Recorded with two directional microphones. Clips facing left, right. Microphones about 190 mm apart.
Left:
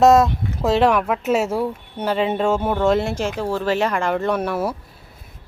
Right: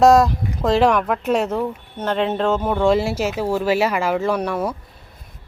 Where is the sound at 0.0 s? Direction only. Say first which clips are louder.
Even; centre (ahead or behind).